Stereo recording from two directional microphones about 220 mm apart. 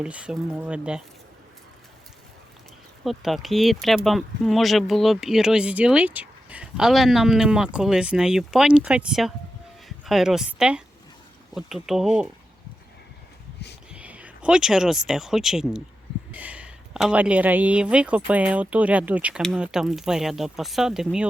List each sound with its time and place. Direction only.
0.0 s speech: 5° right (ahead or behind)
3.0 s speech: centre (ahead or behind)
13.9 s speech: 5° right (ahead or behind)